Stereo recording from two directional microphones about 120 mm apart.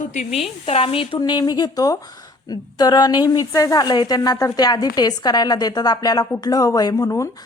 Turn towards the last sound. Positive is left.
turn(degrees=25)  # may be behind; listen again after turning